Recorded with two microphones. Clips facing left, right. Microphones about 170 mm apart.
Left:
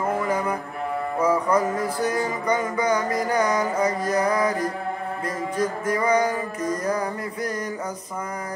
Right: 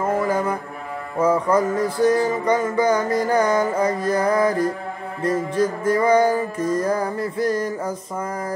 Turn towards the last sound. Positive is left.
turn(degrees=-30)  # may be behind; listen again after turning